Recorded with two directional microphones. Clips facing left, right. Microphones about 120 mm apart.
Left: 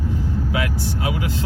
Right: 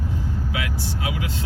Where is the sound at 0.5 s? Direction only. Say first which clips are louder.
Left 5 dB; 40° left (ahead or behind).